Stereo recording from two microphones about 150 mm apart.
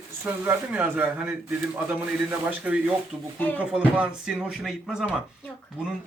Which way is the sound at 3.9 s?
10° right (ahead or behind).